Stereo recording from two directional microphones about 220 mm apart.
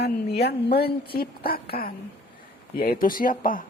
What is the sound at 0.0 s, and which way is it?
Speech, 45° left (ahead or behind).